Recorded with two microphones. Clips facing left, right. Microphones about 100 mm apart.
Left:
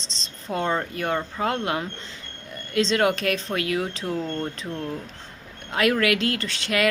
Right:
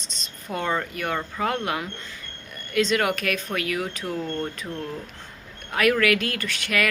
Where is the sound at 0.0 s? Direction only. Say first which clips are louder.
Left 2 dB; 25° left (ahead or behind).